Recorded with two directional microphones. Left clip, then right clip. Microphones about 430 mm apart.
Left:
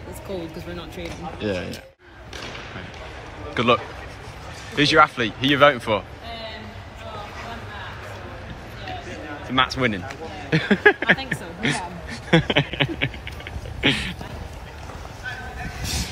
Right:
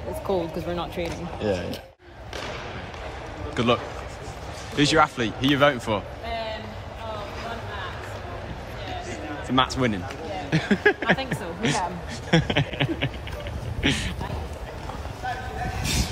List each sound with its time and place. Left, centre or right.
1.4 s speech: centre
3.5 s a man's voice: centre
9.6 s speech: centre
12.3 s a sound: centre
15.2 s vehicle: right